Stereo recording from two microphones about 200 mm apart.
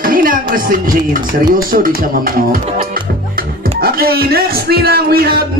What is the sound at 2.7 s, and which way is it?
Music, 45° right (ahead or behind).